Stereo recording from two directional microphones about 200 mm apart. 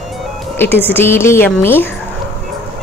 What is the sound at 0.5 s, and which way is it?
A woman's voice, 10° left (ahead or behind).